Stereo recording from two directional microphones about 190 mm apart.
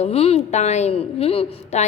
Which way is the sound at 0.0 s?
30° left (ahead or behind).